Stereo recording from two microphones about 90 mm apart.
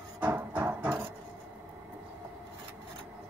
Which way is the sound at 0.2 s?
20° right (ahead or behind).